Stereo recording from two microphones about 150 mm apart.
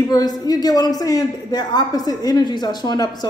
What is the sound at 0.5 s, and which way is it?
A woman's voice, 25° left (ahead or behind).